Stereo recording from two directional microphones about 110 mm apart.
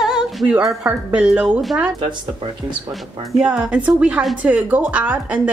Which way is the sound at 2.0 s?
45° right (ahead or behind).